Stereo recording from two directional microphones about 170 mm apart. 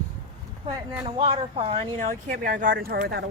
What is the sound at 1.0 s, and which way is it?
Speech, 30° right (ahead or behind).